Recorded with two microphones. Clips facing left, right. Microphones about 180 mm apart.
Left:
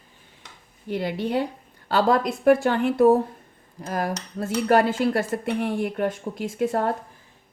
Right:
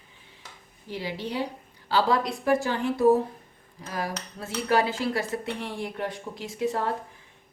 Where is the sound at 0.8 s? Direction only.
55° left (ahead or behind).